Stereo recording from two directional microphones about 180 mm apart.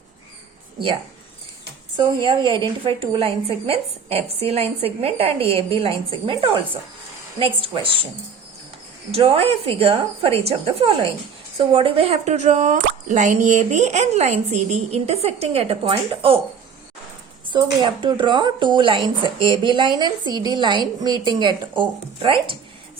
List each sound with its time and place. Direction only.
2.0 s a woman's voice: 25° right (ahead or behind)
9.1 s a woman's voice: 30° right (ahead or behind)
17.5 s speech: 25° right (ahead or behind)